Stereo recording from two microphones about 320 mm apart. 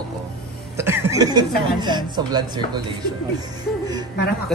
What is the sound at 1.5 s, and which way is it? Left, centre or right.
Speech, left.